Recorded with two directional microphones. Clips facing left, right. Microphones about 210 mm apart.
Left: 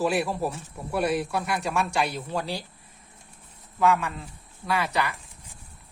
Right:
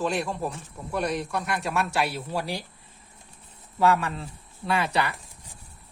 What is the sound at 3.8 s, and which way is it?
Speech, 35° right (ahead or behind).